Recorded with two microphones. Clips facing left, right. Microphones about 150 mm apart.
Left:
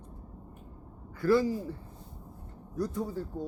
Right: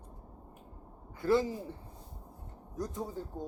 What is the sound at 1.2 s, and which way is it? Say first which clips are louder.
Speech: left 3 dB; 20° right (ahead or behind).